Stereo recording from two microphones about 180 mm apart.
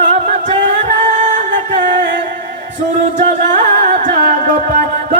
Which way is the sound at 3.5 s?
45° right (ahead or behind).